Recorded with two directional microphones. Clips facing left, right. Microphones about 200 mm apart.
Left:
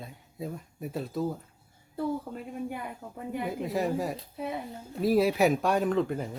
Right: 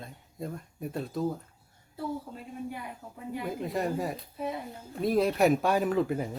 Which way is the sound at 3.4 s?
Centre (ahead or behind).